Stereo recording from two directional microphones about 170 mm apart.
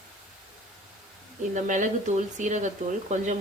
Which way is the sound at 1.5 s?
45° right (ahead or behind).